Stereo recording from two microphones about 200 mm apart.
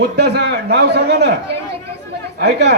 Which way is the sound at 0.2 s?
55° right (ahead or behind).